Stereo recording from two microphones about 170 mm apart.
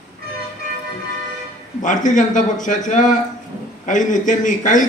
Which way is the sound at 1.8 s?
50° left (ahead or behind).